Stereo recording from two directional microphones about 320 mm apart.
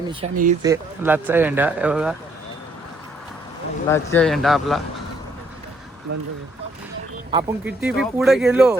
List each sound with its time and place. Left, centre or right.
0.1 s speech: right
0.6 s speech: centre
3.8 s speech: centre
7.3 s speech: centre